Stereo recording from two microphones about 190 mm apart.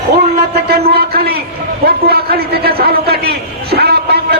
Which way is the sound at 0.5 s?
60° right (ahead or behind).